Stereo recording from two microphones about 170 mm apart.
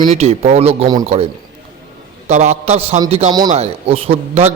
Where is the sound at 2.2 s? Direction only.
40° right (ahead or behind).